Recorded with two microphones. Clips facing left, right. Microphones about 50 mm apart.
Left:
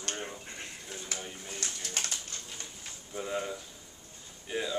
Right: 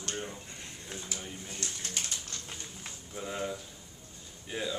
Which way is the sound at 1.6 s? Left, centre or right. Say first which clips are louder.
Left 2 dB; left.